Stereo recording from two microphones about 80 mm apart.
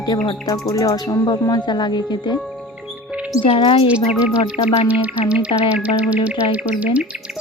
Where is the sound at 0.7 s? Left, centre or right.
Left.